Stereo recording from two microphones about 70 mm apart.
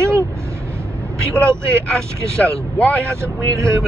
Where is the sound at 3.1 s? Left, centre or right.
Right.